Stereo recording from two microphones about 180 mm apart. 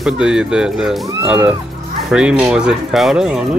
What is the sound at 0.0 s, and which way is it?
Speech, 5° right (ahead or behind).